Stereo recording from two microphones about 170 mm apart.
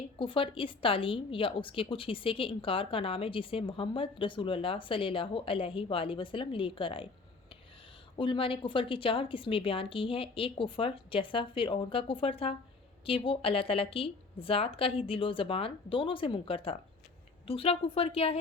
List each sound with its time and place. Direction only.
0.2 s a woman's voice: 30° left (ahead or behind)
8.2 s a woman's voice: 30° left (ahead or behind)